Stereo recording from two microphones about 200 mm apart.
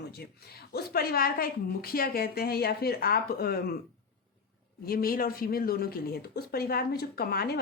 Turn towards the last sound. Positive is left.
turn(degrees=50)  # may be behind; listen again after turning